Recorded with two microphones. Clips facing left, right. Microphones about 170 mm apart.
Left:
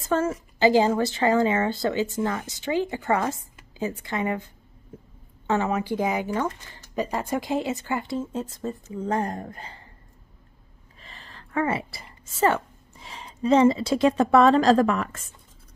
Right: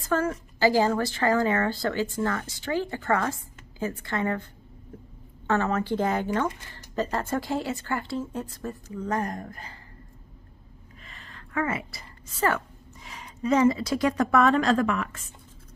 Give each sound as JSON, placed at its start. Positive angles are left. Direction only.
{"t": 0.1, "sound": "a woman's voice", "side_deg": 25}
{"t": 5.5, "sound": "speech", "side_deg": 15}
{"t": 11.1, "sound": "a woman's voice", "side_deg": 30}